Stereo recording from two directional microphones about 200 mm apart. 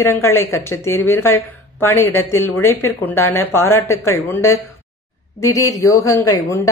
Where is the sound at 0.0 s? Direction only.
15° left (ahead or behind).